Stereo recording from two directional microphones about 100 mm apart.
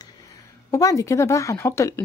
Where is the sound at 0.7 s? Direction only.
35° left (ahead or behind).